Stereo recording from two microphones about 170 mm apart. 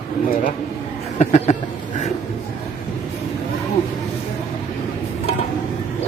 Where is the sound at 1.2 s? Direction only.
40° left (ahead or behind).